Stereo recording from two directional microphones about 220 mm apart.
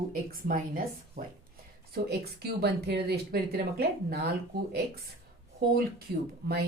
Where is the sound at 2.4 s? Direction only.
45° right (ahead or behind).